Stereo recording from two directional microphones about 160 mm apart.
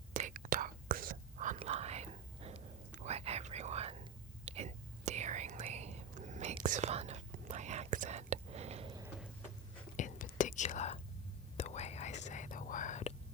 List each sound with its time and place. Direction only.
0.2 s whispering: 50° right (ahead or behind)
1.5 s whispering: 40° right (ahead or behind)
10.0 s whispering: 55° left (ahead or behind)